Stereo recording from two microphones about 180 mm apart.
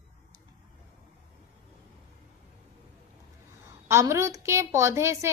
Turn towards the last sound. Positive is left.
turn(degrees=-15)  # may be behind; listen again after turning